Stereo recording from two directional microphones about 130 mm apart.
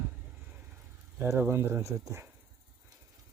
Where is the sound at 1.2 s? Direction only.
15° right (ahead or behind).